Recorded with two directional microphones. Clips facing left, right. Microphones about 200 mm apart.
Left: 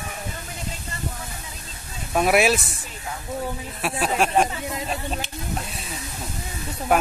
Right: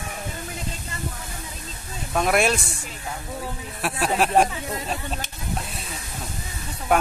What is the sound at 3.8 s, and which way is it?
Speech, centre (ahead or behind).